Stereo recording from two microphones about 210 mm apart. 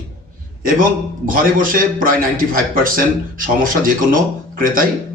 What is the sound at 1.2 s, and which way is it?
A man's voice, 40° right (ahead or behind).